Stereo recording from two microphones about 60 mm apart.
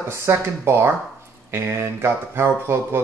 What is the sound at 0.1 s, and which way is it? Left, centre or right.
Speech, right.